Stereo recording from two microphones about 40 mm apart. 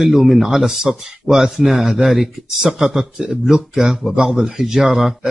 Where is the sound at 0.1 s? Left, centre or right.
Centre.